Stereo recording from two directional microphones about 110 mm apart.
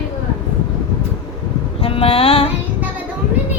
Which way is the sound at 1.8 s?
60° left (ahead or behind).